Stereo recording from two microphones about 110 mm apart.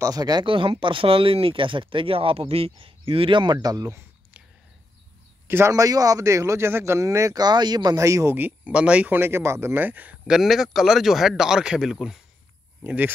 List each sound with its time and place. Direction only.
0.0 s speech: 35° right (ahead or behind)
0.5 s speech: 50° right (ahead or behind); by 4.0 s 35° right (ahead or behind)
5.5 s speech: 25° right (ahead or behind)